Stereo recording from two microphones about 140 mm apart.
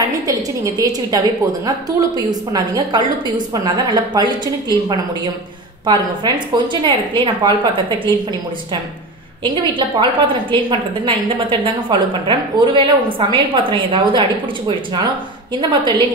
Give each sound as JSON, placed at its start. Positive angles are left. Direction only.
{"t": 0.0, "sound": "a woman's voice", "side_deg": -25}
{"t": 9.4, "sound": "a woman's voice", "side_deg": -35}
{"t": 15.8, "sound": "a woman's voice", "side_deg": -35}